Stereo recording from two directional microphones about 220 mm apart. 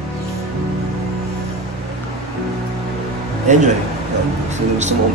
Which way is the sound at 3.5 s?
30° right (ahead or behind).